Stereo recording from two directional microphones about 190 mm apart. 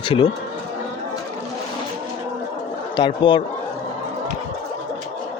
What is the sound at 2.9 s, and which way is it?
Speech, 25° left (ahead or behind).